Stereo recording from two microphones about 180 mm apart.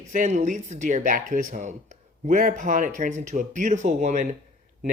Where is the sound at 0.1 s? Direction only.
45° right (ahead or behind).